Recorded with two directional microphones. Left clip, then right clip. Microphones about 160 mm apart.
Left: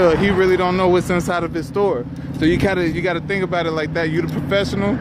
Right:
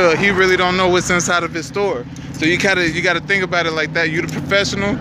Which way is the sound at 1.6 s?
30° left (ahead or behind).